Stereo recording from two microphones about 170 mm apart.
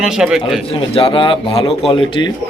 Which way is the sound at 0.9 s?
30° left (ahead or behind).